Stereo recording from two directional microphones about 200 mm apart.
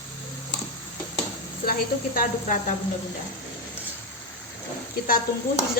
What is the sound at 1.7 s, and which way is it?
Speech, 45° left (ahead or behind).